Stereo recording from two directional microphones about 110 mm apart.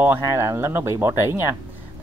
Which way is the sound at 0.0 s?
20° right (ahead or behind).